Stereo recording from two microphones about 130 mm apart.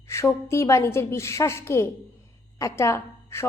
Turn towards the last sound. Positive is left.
turn(degrees=20)  # may be behind; listen again after turning